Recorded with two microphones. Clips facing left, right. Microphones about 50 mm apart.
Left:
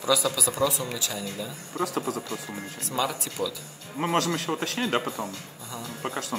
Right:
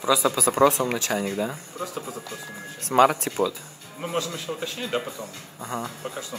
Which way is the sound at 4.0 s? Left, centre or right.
Left.